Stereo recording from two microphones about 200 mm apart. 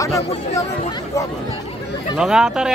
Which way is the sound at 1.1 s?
15° left (ahead or behind).